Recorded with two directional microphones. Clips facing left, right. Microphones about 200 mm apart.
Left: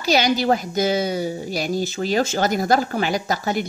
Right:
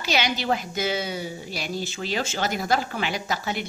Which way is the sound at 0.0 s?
40° left (ahead or behind).